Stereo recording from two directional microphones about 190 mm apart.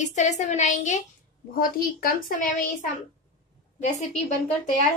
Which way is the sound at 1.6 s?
50° left (ahead or behind).